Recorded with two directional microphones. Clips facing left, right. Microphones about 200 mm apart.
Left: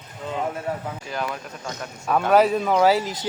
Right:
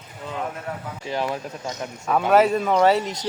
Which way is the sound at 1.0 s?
25° right (ahead or behind).